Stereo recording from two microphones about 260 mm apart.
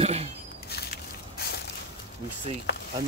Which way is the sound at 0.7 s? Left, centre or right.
Left.